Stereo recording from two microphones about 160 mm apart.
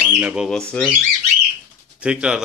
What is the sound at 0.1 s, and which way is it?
Speech, 5° right (ahead or behind).